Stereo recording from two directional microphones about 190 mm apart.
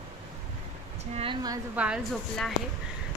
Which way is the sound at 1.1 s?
25° right (ahead or behind).